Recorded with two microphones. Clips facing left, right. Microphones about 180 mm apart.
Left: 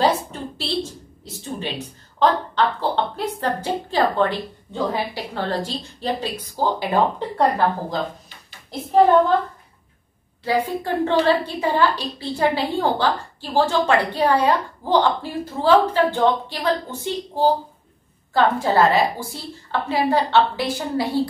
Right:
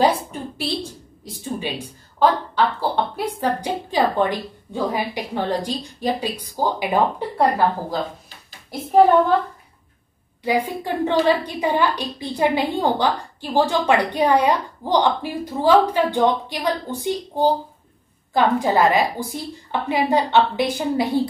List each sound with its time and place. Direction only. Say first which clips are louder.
0.0 s a woman's voice: right 1 dB; 10° right (ahead or behind)
10.4 s speech: even; 15° right (ahead or behind)